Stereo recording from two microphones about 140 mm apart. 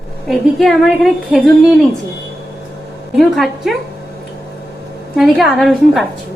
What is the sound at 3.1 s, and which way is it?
Speech, centre (ahead or behind).